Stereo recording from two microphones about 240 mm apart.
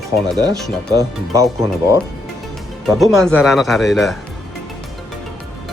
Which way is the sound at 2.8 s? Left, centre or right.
Centre.